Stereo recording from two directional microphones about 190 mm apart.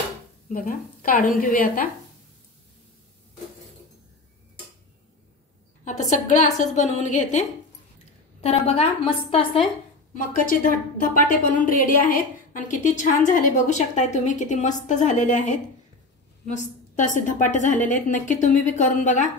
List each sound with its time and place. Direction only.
0.5 s a woman's voice: 45° left (ahead or behind)
5.9 s a sound: 40° left (ahead or behind)
6.6 s a woman's voice: 40° left (ahead or behind)
10.1 s a woman's voice: 45° left (ahead or behind)